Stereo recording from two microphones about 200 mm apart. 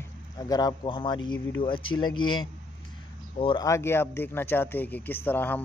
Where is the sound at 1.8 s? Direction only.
90° left.